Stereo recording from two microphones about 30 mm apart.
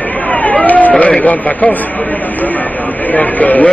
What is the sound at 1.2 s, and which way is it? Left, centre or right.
Speech, left.